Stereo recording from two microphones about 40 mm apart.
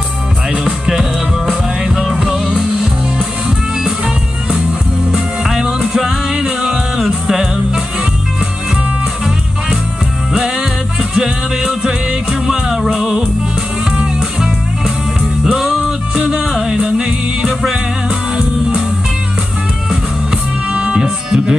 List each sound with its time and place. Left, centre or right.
0.5 s music: centre
2.1 s music: centre
10.3 s music: centre
15.4 s music: centre
20.7 s music: right